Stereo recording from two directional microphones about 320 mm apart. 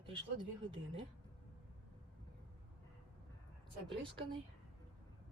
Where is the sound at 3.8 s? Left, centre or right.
Centre.